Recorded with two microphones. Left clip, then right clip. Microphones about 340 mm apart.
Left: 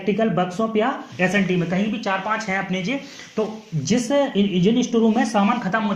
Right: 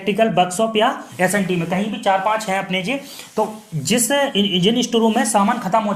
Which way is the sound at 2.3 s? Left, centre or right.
Right.